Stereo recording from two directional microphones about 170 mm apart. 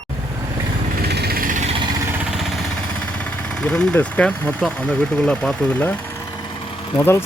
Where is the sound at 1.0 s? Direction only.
70° right (ahead or behind); by 1.6 s 55° right (ahead or behind).